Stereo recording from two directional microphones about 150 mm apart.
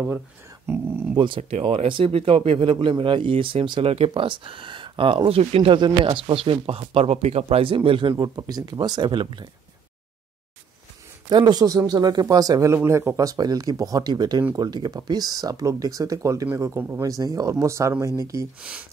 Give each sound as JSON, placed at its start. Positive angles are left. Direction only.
{"t": 0.7, "sound": "speech", "side_deg": -15}
{"t": 1.1, "sound": "speech", "side_deg": -35}
{"t": 11.2, "sound": "speech", "side_deg": -30}
{"t": 18.6, "sound": "speech", "side_deg": -10}